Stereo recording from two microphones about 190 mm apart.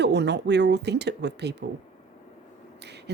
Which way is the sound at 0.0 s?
65° right (ahead or behind).